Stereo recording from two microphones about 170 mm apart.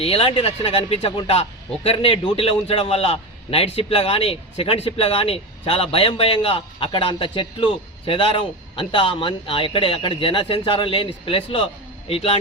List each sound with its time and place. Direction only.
0.0 s a man's voice: 35° left (ahead or behind)